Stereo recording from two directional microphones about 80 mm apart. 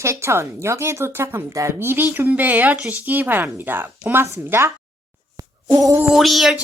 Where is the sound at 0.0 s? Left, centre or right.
Right.